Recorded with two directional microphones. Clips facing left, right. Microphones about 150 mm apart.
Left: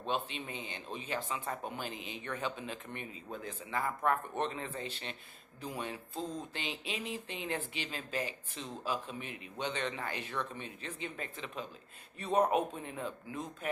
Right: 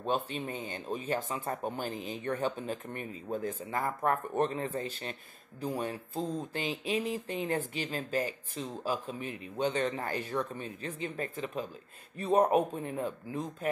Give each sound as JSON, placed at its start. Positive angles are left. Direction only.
{"t": 0.0, "sound": "speech", "side_deg": -45}